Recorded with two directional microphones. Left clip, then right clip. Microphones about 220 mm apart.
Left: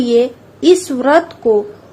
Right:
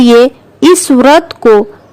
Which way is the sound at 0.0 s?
50° right (ahead or behind).